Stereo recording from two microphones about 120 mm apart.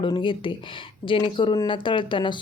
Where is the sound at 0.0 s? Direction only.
45° left (ahead or behind).